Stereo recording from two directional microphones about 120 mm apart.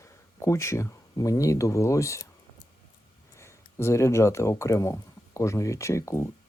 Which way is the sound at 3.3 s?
20° left (ahead or behind).